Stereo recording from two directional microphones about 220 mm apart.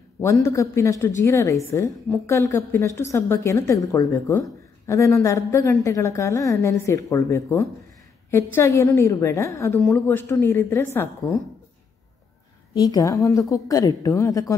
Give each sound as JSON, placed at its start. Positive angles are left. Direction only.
{"t": 0.2, "sound": "a woman's voice", "side_deg": 15}
{"t": 12.7, "sound": "a woman's voice", "side_deg": 15}